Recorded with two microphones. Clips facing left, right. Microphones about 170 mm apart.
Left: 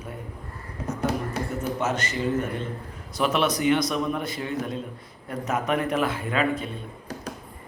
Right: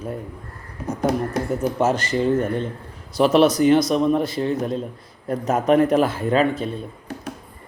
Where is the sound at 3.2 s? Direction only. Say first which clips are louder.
Right 8 dB; 35° right (ahead or behind).